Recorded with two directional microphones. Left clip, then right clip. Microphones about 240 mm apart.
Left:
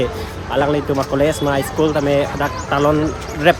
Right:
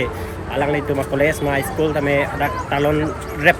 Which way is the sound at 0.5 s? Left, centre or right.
Centre.